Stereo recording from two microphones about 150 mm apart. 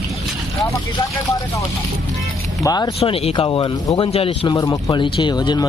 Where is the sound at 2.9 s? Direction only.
40° left (ahead or behind).